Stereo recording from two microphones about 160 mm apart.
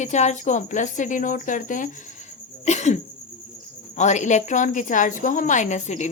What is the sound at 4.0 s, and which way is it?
A woman's voice, 50° left (ahead or behind).